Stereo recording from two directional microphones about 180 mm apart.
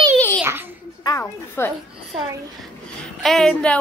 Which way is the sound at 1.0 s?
15° left (ahead or behind).